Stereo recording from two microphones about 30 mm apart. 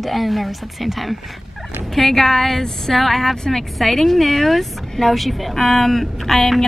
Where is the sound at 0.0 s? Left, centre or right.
Centre.